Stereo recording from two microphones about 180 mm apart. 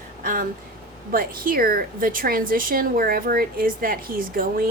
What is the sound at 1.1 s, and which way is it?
A woman's voice, 55° right (ahead or behind).